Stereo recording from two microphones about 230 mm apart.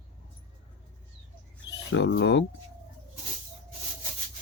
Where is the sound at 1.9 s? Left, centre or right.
Left.